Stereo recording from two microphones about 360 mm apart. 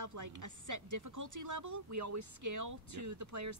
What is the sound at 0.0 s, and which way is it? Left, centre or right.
Speech, right.